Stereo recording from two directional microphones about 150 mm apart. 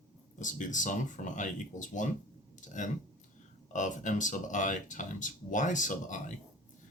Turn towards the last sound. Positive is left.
turn(degrees=60)  # may be behind; listen again after turning